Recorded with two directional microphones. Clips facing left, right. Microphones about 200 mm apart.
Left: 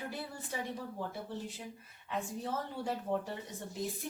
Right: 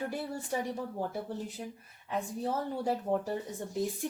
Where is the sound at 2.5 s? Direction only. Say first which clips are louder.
Right 7 dB; 40° right (ahead or behind).